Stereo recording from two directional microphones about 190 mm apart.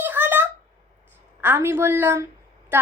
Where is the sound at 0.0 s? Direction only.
10° right (ahead or behind).